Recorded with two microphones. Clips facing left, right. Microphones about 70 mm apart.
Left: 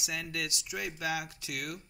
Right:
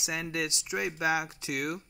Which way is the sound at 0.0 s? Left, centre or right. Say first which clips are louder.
Right 4 dB; right.